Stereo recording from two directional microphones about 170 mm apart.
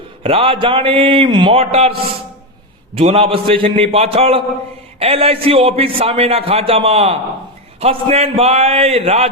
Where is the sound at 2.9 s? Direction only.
35° right (ahead or behind).